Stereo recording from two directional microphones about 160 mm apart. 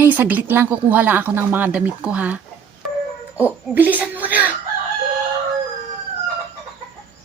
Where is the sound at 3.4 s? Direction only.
10° right (ahead or behind).